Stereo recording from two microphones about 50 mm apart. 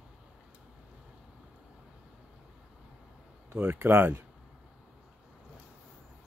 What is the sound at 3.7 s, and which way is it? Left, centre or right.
Speech, right.